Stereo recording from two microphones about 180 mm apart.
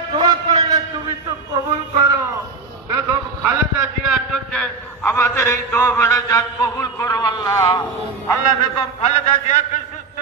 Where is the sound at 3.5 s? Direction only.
5° right (ahead or behind); by 7.8 s 20° left (ahead or behind).